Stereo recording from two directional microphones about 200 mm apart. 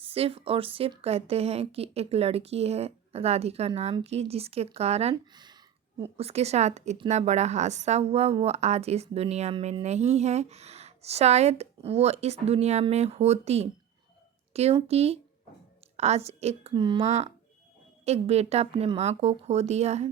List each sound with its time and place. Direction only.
0.0 s a woman's voice: 30° right (ahead or behind)